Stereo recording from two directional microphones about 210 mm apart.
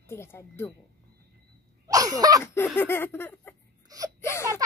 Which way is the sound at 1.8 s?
15° right (ahead or behind).